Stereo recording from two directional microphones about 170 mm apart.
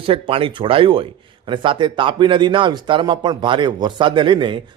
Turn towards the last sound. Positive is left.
turn(degrees=-30)  # may be behind; listen again after turning